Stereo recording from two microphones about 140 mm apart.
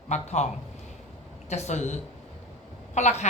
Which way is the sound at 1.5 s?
55° left (ahead or behind).